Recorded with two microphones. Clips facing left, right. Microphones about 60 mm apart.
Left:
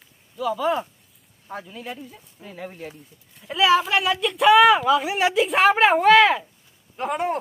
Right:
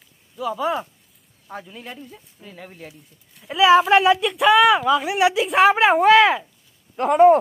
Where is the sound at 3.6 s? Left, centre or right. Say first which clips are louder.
Right 5 dB; right.